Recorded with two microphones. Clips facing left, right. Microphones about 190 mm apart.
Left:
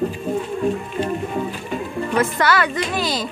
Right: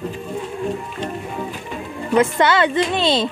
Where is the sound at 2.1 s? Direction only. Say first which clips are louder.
Right 4 dB; 20° right (ahead or behind).